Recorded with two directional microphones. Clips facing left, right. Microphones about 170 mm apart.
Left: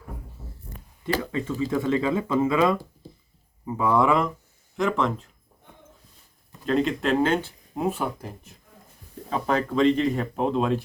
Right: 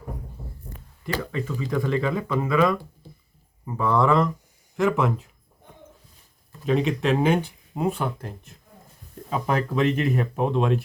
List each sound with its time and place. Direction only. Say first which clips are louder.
1.0 s speech: left 2 dB; 25° left (ahead or behind)
4.8 s speech: right 2 dB; 5° right (ahead or behind)
6.7 s speech: right 1 dB; 5° right (ahead or behind)
7.8 s speech: right 1 dB; 5° left (ahead or behind)
9.3 s speech: even; 5° right (ahead or behind)